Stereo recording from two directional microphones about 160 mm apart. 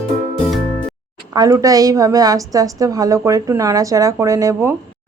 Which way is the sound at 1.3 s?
20° right (ahead or behind).